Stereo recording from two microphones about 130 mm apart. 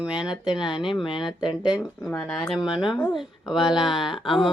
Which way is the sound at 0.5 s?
35° left (ahead or behind).